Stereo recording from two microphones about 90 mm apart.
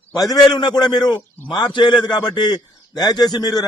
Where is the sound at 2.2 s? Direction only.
50° left (ahead or behind).